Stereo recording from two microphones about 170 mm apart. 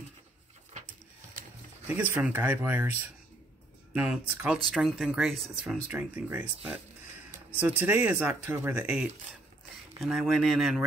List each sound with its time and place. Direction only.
1.9 s speech: 10° right (ahead or behind)
3.9 s speech: 10° right (ahead or behind)